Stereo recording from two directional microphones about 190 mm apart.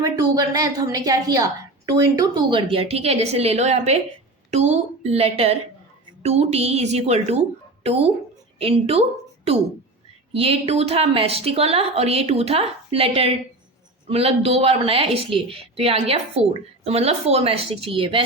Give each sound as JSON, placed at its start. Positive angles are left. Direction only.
{"t": 0.0, "sound": "a woman's voice", "side_deg": -20}